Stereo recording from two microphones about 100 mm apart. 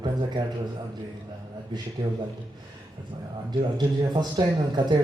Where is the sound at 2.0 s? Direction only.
40° right (ahead or behind).